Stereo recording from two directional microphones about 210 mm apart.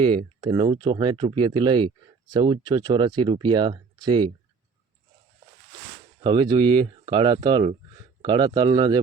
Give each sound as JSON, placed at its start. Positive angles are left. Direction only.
{"t": 0.0, "sound": "speech", "side_deg": -25}
{"t": 6.2, "sound": "speech", "side_deg": -20}